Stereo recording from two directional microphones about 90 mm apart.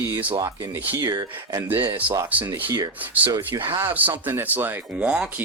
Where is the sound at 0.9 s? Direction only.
35° right (ahead or behind).